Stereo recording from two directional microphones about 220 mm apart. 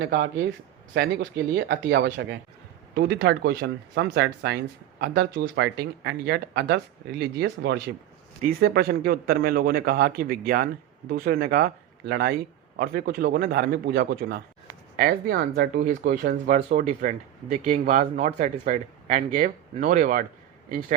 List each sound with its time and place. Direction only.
0.0 s speech: 55° right (ahead or behind); by 20.2 s 35° right (ahead or behind)